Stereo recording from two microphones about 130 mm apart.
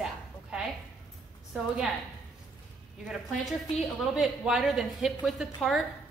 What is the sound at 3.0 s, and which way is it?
A woman's voice, 5° right (ahead or behind).